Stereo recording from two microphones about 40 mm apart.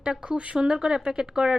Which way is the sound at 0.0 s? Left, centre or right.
Right.